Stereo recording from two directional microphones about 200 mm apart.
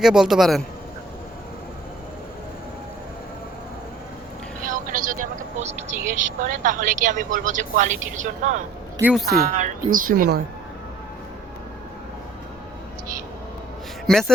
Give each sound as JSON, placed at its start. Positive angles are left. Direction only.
{"t": 0.0, "sound": "a man's voice", "side_deg": 0}
{"t": 4.6, "sound": "vehicle", "side_deg": -45}
{"t": 6.1, "sound": "a woman's voice", "side_deg": -40}
{"t": 9.0, "sound": "speech", "side_deg": -5}
{"t": 9.3, "sound": "speech", "side_deg": -45}
{"t": 14.1, "sound": "a man's voice", "side_deg": 0}